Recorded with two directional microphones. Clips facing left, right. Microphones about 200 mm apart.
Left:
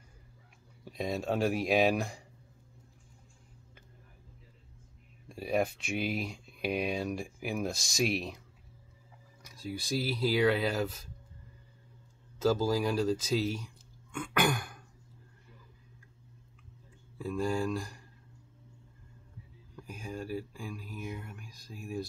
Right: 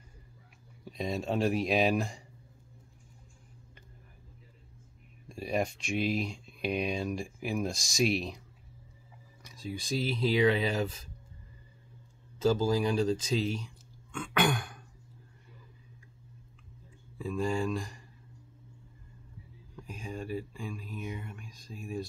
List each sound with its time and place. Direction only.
0.8 s speech: centre (ahead or behind)
5.3 s speech: 5° left (ahead or behind)
9.4 s speech: 5° left (ahead or behind)
12.4 s speech: centre (ahead or behind)
17.2 s speech: 5° left (ahead or behind)
19.7 s speech: 5° left (ahead or behind)